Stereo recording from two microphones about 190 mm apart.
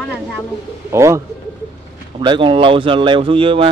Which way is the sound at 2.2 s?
25° right (ahead or behind).